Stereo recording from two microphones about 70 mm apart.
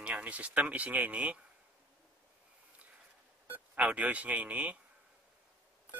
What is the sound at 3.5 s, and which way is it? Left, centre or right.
Speech, right.